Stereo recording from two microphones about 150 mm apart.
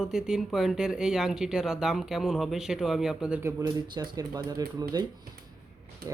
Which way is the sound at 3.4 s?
25° right (ahead or behind).